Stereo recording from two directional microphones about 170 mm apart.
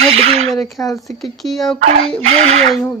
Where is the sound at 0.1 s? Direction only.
35° right (ahead or behind).